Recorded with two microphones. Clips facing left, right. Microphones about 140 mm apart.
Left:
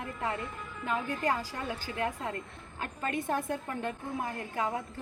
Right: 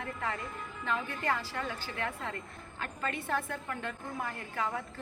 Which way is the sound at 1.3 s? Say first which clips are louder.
Left 1 dB; 15° left (ahead or behind).